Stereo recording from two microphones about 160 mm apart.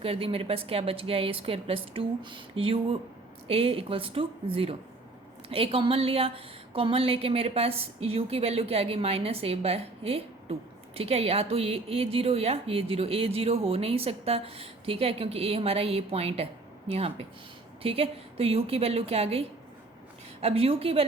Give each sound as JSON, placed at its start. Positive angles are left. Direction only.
{"t": 0.0, "sound": "a woman's voice", "side_deg": -35}